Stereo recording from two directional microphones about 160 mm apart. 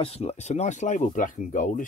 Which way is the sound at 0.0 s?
40° left (ahead or behind).